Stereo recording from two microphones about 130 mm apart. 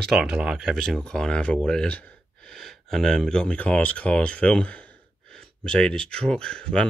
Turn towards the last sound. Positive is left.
turn(degrees=5)  # may be behind; listen again after turning